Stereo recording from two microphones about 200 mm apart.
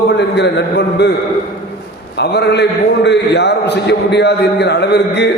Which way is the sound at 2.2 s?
55° left (ahead or behind).